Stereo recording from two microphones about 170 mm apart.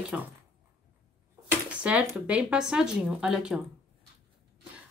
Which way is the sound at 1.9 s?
10° right (ahead or behind).